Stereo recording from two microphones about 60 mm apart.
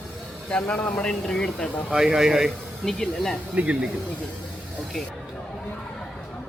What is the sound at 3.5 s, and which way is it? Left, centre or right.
Speech, right.